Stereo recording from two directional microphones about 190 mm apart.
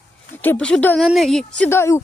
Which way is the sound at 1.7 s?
15° left (ahead or behind).